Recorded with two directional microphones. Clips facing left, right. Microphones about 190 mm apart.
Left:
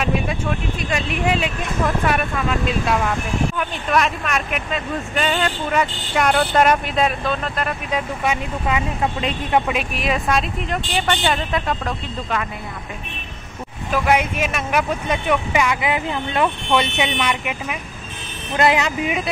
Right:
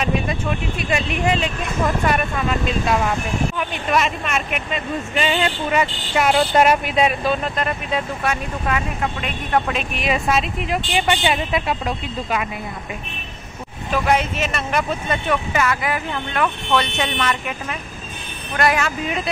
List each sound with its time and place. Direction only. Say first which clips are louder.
0.0 s speech: even; centre (ahead or behind)
7.9 s speech: left 3 dB; 15° left (ahead or behind); by 12.4 s 10° right (ahead or behind)
14.0 s speech: left 1 dB; 10° left (ahead or behind)